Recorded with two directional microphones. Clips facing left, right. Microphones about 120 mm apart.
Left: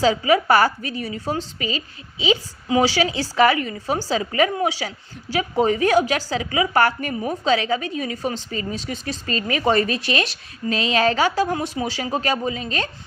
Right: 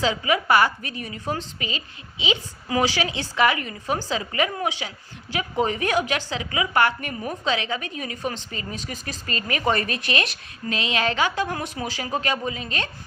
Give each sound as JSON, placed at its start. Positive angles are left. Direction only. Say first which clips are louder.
{"t": 0.0, "sound": "speech", "louder": "left 5 dB", "side_deg": 35}
{"t": 2.6, "sound": "speech", "louder": "left 4 dB", "side_deg": 25}